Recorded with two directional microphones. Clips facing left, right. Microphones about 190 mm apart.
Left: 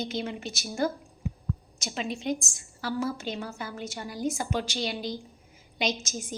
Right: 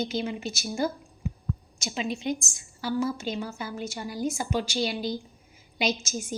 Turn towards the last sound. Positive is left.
turn(degrees=-5)  # may be behind; listen again after turning